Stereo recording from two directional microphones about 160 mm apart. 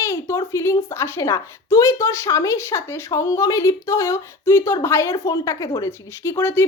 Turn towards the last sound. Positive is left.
turn(degrees=15)  # may be behind; listen again after turning